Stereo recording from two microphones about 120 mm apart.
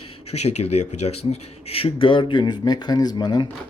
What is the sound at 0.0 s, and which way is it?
Speech, 60° left (ahead or behind).